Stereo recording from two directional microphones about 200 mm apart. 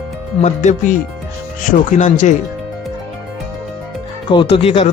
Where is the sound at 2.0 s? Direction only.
40° left (ahead or behind).